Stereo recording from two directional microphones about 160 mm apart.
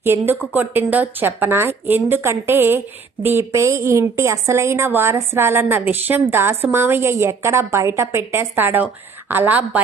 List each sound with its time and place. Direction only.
0.0 s a woman's voice: 15° right (ahead or behind)